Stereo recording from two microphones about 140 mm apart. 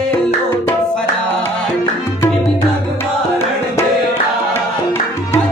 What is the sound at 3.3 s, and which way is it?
Music, 15° left (ahead or behind).